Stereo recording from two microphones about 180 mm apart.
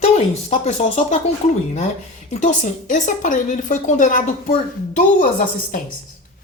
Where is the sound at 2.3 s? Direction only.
40° left (ahead or behind).